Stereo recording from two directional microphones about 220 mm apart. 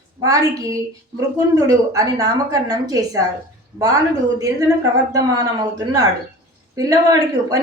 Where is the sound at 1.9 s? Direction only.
15° right (ahead or behind).